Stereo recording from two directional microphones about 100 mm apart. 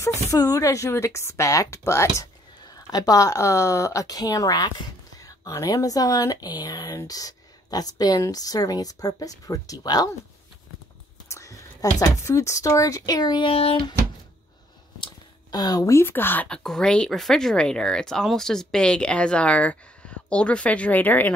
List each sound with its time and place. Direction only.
0.3 s speech: 35° left (ahead or behind)
2.6 s speech: 40° left (ahead or behind)
11.2 s speech: 30° left (ahead or behind)
13.5 s a sound: 70° left (ahead or behind)
15.5 s speech: 40° left (ahead or behind); by 16.4 s 20° left (ahead or behind)
16.4 s speech: 5° left (ahead or behind)